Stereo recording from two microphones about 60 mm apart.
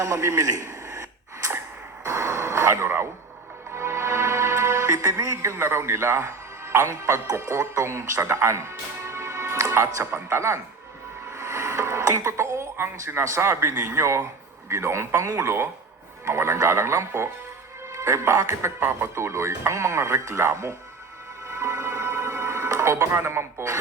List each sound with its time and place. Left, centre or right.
0.0 s a man's voice: right
0.6 s radio: right
2.0 s music: right
9.7 s speech: right
10.1 s speech: right
11.3 s a sound: right
13.2 s speech: right
18.8 s speech: right
21.5 s music: right